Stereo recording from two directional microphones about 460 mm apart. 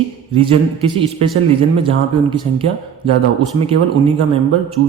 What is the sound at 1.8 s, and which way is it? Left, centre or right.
A man's voice, centre.